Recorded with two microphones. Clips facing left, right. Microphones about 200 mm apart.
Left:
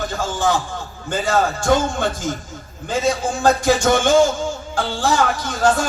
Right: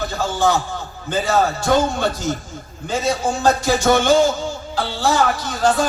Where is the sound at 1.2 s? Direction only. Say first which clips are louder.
Right 1 dB; 50° left (ahead or behind).